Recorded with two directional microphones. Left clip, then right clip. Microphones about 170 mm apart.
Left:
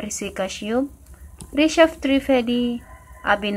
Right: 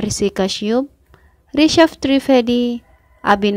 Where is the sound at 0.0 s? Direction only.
45° right (ahead or behind).